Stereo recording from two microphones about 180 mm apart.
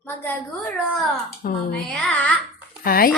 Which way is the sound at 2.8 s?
55° left (ahead or behind).